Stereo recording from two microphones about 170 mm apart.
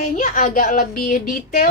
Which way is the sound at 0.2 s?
50° left (ahead or behind).